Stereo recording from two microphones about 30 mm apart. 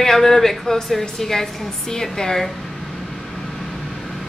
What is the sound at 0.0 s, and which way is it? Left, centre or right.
A woman's voice, centre.